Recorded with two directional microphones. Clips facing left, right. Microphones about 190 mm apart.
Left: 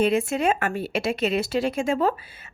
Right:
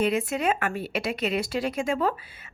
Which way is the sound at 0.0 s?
25° left (ahead or behind).